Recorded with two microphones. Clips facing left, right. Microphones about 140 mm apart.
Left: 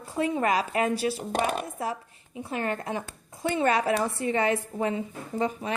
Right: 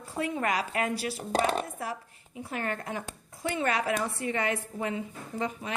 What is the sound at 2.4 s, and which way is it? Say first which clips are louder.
A woman's voice: left 3 dB; 25° left (ahead or behind).